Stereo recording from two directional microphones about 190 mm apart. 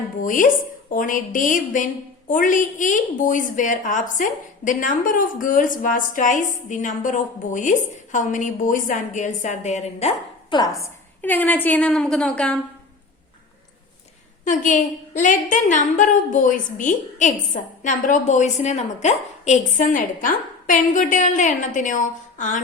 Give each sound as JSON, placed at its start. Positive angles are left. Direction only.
{"t": 0.2, "sound": "a woman's voice", "side_deg": 45}
{"t": 10.5, "sound": "a woman's voice", "side_deg": 20}
{"t": 10.8, "sound": "a woman's voice", "side_deg": 10}
{"t": 14.4, "sound": "a woman's voice", "side_deg": 45}